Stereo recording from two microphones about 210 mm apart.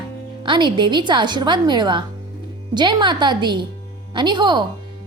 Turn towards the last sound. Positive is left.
turn(degrees=-20)  # may be behind; listen again after turning